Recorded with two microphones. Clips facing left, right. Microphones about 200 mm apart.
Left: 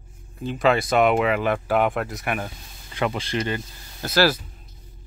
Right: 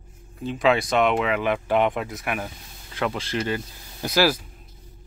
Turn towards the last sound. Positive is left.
turn(degrees=-10)  # may be behind; listen again after turning